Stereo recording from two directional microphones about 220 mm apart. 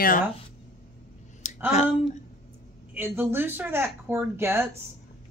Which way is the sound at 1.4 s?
35° left (ahead or behind).